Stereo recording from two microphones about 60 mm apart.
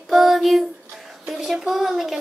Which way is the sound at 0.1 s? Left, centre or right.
Centre.